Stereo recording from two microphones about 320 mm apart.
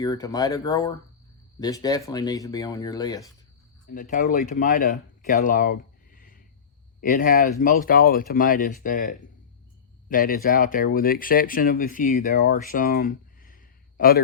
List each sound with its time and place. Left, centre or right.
0.0 s speech: centre
3.9 s speech: left